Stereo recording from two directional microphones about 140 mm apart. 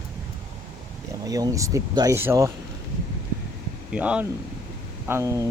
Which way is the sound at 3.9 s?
10° right (ahead or behind).